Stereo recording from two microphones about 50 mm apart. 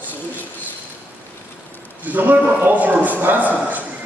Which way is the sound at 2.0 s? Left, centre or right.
Right.